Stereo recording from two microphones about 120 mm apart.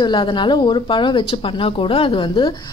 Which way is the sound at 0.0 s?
40° left (ahead or behind).